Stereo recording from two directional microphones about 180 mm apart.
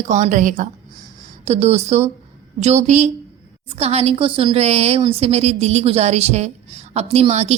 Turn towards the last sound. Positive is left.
turn(degrees=-35)  # may be behind; listen again after turning